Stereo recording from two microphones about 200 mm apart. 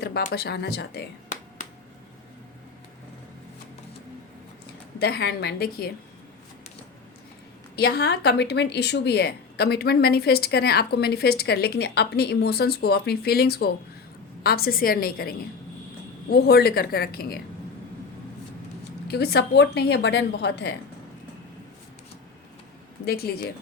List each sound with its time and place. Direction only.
0.3 s a woman's voice: 55° left (ahead or behind)
4.9 s a woman's voice: 55° left (ahead or behind)
7.8 s a woman's voice: 55° left (ahead or behind)
19.0 s a woman's voice: 55° left (ahead or behind)
23.0 s a woman's voice: 50° left (ahead or behind)